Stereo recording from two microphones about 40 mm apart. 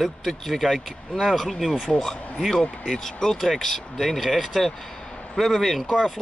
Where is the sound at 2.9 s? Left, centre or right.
Centre.